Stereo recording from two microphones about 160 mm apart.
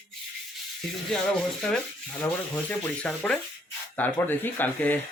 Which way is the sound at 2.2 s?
10° left (ahead or behind).